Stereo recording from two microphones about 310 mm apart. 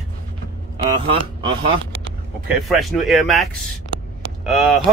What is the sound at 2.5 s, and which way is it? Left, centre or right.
Speech, centre.